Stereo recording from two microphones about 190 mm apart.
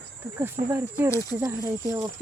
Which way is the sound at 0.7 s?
15° right (ahead or behind).